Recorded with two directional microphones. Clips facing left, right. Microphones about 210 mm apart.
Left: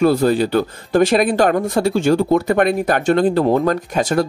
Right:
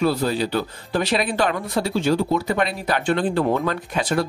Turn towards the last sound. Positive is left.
turn(degrees=45)  # may be behind; listen again after turning